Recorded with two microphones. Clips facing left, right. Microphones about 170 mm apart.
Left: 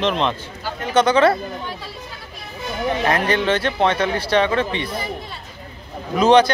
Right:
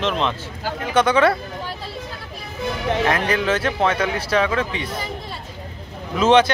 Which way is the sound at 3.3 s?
30° left (ahead or behind).